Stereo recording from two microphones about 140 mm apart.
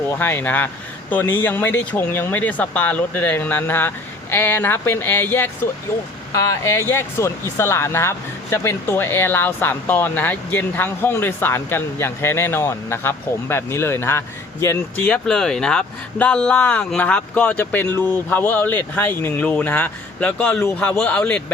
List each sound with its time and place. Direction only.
0.2 s speech: 15° left (ahead or behind)